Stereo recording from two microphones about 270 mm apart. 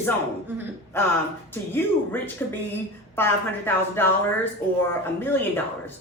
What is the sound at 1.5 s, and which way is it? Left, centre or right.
A woman's voice, centre.